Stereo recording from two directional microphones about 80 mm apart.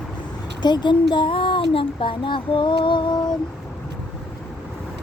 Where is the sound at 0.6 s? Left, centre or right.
Left.